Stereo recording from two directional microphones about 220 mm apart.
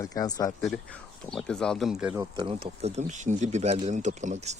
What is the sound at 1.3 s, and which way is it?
Speech, 5° left (ahead or behind).